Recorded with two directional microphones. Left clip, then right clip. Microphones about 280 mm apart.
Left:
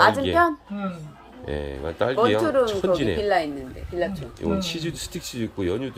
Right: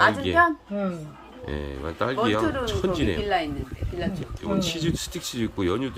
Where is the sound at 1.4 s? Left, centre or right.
Centre.